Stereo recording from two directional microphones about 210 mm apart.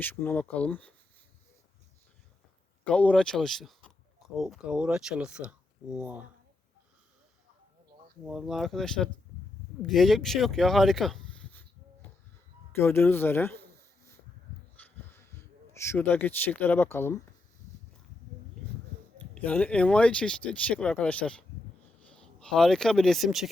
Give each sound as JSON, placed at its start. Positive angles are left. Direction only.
{"t": 0.0, "sound": "speech", "side_deg": 10}
{"t": 2.8, "sound": "speech", "side_deg": 5}
{"t": 8.3, "sound": "speech", "side_deg": 0}
{"t": 12.8, "sound": "speech", "side_deg": 10}
{"t": 14.8, "sound": "a sound", "side_deg": 10}
{"t": 15.1, "sound": "speech", "side_deg": 10}
{"t": 19.3, "sound": "speech", "side_deg": 5}